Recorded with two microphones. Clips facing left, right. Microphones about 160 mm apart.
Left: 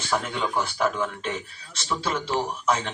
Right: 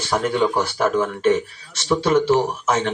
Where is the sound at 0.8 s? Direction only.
45° right (ahead or behind).